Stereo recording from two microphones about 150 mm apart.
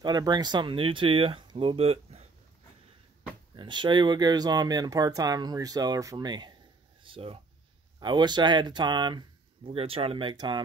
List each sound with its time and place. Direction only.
0.0 s speech: 30° right (ahead or behind)
3.5 s speech: 30° right (ahead or behind)